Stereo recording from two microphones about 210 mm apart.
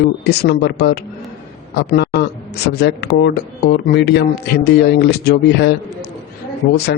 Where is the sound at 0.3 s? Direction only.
50° left (ahead or behind).